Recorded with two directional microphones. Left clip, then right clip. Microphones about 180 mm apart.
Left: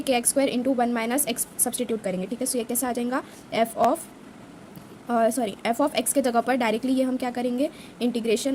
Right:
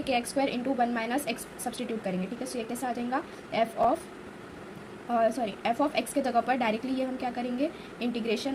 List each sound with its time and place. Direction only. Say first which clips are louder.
0.0 s a woman's voice: left 5 dB; 55° left (ahead or behind)
5.0 s a woman's voice: left 4 dB; 60° left (ahead or behind)